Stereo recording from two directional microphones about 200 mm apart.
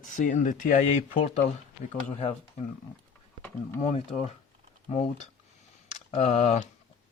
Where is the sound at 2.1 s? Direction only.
35° left (ahead or behind).